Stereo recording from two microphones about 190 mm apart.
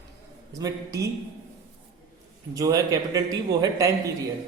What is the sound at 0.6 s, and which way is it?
Speech, 20° right (ahead or behind).